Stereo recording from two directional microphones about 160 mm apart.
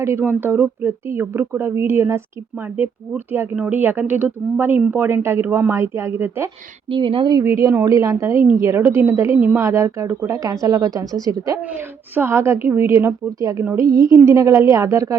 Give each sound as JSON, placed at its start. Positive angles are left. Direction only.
{"t": 0.0, "sound": "a woman's voice", "side_deg": -15}
{"t": 3.3, "sound": "a woman's voice", "side_deg": -10}
{"t": 6.9, "sound": "a woman's voice", "side_deg": -30}